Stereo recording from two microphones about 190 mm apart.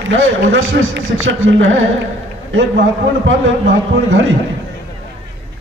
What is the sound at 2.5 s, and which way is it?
A man's voice, 75° right (ahead or behind).